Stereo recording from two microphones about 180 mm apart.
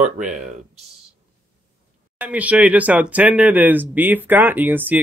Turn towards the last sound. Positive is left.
turn(degrees=-10)  # may be behind; listen again after turning